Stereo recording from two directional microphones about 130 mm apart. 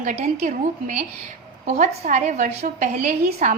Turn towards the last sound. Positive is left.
turn(degrees=-70)  # may be behind; listen again after turning